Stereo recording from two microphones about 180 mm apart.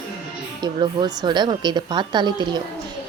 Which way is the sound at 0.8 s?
25° right (ahead or behind).